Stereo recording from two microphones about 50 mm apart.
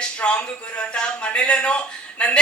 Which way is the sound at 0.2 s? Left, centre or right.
Left.